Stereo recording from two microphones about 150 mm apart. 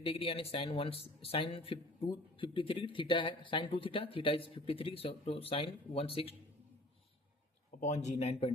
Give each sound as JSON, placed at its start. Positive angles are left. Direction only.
{"t": 0.0, "sound": "speech", "side_deg": 40}
{"t": 7.8, "sound": "speech", "side_deg": 50}